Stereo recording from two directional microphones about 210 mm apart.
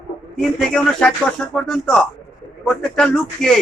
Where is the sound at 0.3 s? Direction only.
5° left (ahead or behind).